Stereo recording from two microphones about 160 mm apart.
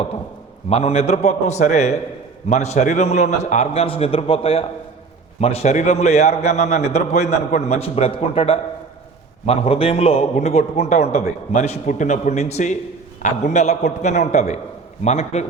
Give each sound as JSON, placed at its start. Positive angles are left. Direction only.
{"t": 0.7, "sound": "a man's voice", "side_deg": 40}